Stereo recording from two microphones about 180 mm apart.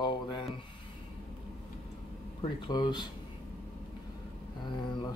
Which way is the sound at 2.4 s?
25° left (ahead or behind).